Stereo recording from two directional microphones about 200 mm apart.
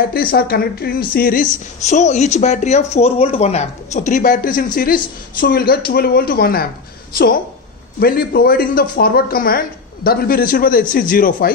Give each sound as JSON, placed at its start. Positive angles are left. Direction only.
{"t": 0.1, "sound": "a woman's voice", "side_deg": 50}
{"t": 8.0, "sound": "speech", "side_deg": 50}